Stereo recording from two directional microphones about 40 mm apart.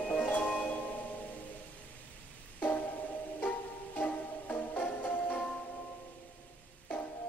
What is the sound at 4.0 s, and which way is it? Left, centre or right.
Music, left.